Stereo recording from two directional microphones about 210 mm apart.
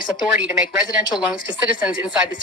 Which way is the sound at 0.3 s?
5° right (ahead or behind).